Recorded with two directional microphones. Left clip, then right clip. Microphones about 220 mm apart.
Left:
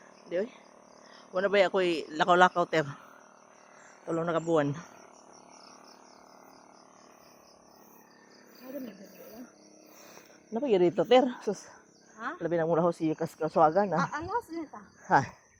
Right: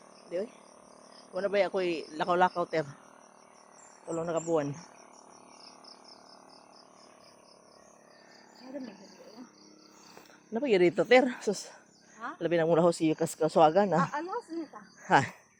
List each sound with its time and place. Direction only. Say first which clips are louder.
0.3 s cricket: left 3 dB; 30° left (ahead or behind)
1.3 s speech: left 3 dB; 30° left (ahead or behind)
4.0 s speech: left 2 dB; 35° left (ahead or behind)
10.5 s speech: even; 5° left (ahead or behind)
15.0 s speech: even; centre (ahead or behind)